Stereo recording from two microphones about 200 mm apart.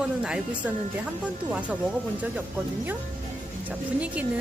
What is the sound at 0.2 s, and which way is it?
A woman's voice, 5° right (ahead or behind).